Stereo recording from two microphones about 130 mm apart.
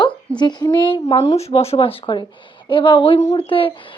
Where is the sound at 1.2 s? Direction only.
55° left (ahead or behind).